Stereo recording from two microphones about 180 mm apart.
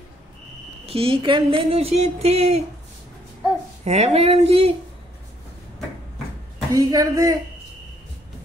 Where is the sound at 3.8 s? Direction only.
35° right (ahead or behind).